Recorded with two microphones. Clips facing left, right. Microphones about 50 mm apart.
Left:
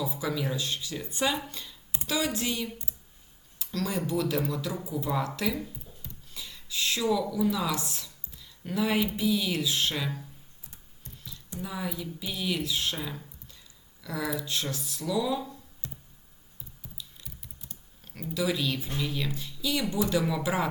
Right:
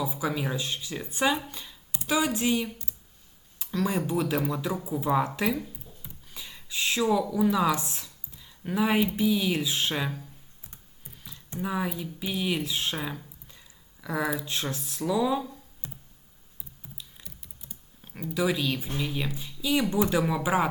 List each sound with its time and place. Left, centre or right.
0.0 s speech: centre
6.0 s a sound: right
9.1 s speech: centre
11.2 s a sound: right
11.9 s speech: right
14.0 s speech: centre
15.8 s computer keyboard: right
16.8 s typing: right
18.0 s a sound: right
18.3 s speech: right